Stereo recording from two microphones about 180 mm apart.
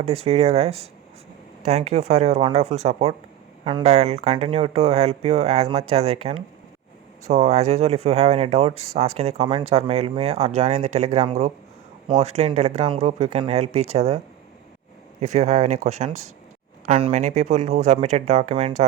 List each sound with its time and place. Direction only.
0.0 s speech: 35° right (ahead or behind)
15.2 s speech: 40° right (ahead or behind)